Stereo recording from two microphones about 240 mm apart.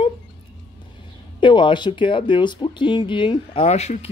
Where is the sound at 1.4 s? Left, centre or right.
Centre.